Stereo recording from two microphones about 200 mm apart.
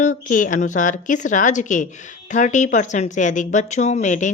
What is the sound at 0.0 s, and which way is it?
Speech, 40° left (ahead or behind).